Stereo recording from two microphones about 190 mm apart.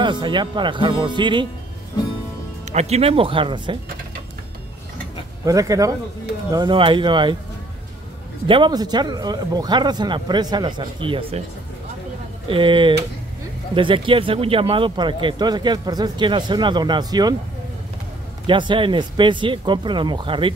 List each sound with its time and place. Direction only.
0.0 s speech: 25° right (ahead or behind)
2.7 s speech: 35° right (ahead or behind)
5.4 s speech: 20° right (ahead or behind)
8.5 s speech: 25° right (ahead or behind)
12.4 s speech: 25° right (ahead or behind)
18.5 s speech: 25° right (ahead or behind)